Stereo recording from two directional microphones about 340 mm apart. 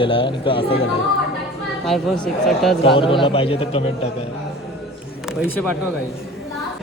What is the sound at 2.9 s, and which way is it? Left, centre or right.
Speech, centre.